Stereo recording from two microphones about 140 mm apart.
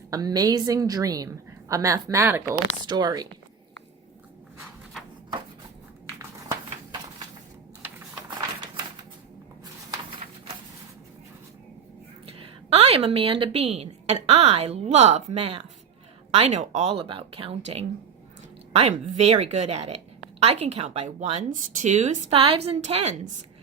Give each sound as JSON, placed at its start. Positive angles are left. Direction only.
{"t": 0.1, "sound": "a woman's voice", "side_deg": -25}
{"t": 2.8, "sound": "a woman's voice", "side_deg": -30}
{"t": 12.4, "sound": "a woman's voice", "side_deg": -45}